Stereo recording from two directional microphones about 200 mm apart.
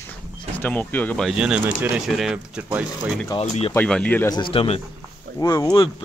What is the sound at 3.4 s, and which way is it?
Speech, 35° left (ahead or behind).